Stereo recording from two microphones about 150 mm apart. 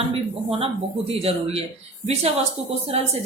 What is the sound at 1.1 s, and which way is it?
Speech, 40° right (ahead or behind).